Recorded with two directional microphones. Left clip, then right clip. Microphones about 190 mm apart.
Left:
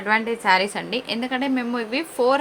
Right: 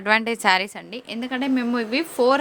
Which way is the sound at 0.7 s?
30° right (ahead or behind).